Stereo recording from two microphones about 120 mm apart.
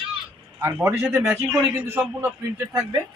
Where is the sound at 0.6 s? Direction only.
20° right (ahead or behind).